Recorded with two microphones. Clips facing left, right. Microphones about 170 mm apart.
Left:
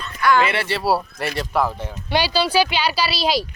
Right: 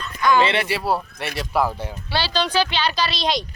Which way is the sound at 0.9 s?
Centre (ahead or behind).